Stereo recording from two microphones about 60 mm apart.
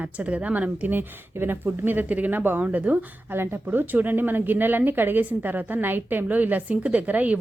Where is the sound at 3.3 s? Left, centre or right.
Right.